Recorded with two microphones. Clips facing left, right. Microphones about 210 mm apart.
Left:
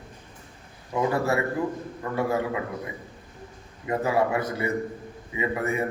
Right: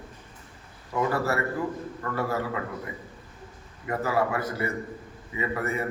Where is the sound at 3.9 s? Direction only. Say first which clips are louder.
Left 2 dB; 15° left (ahead or behind).